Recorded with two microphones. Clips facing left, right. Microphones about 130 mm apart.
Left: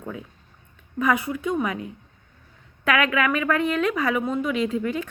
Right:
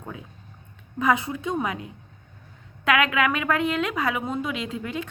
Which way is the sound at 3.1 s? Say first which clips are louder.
Left 1 dB; 20° right (ahead or behind).